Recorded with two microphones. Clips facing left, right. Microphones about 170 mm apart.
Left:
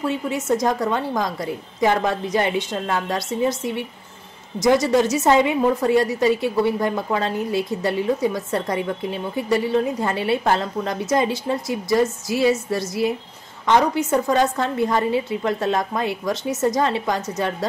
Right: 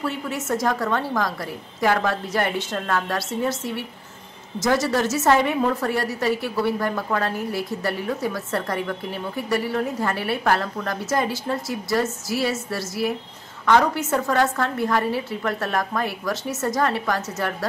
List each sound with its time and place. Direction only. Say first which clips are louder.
0.0 s a woman's voice: left 4 dB; 15° left (ahead or behind)